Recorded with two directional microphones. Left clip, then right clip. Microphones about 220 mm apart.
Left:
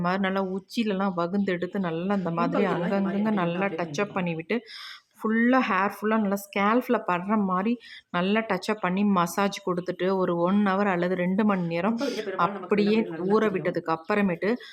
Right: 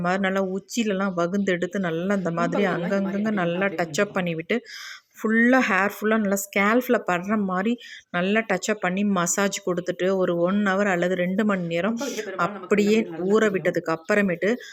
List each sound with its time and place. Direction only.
0.0 s speech: 10° right (ahead or behind)
11.9 s speech: 5° left (ahead or behind)
12.4 s speech: 10° right (ahead or behind)